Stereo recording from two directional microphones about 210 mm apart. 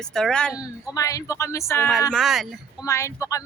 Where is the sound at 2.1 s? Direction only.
Centre (ahead or behind).